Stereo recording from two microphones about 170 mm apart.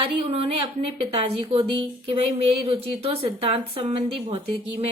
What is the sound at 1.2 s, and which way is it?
Speech, 35° right (ahead or behind).